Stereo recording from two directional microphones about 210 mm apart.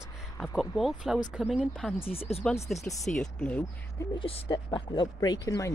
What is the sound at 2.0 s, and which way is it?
Speech, 25° left (ahead or behind).